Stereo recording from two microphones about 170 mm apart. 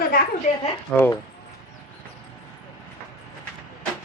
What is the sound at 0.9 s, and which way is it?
Speech, 5° left (ahead or behind).